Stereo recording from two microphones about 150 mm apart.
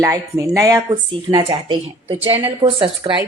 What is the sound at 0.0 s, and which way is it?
Speech, 20° right (ahead or behind).